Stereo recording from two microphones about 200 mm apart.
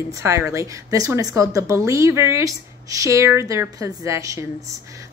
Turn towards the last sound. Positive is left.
turn(degrees=-15)  # may be behind; listen again after turning